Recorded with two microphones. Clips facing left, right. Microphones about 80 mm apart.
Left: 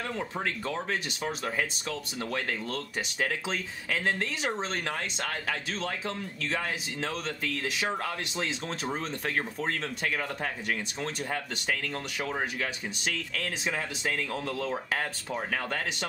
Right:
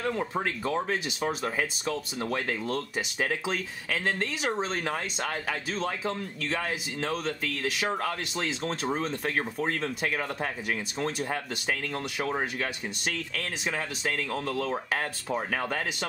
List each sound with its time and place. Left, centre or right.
0.0 s speech: centre